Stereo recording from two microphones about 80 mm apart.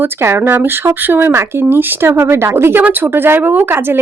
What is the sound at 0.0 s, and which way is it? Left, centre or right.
Speech, right.